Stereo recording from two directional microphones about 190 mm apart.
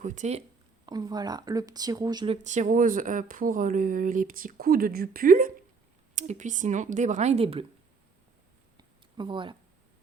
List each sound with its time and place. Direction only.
0.0 s speech: 40° right (ahead or behind)
0.9 s speech: 20° right (ahead or behind); by 5.5 s 50° right (ahead or behind)
6.1 s speech: 40° right (ahead or behind)
8.8 s a sound: 25° right (ahead or behind)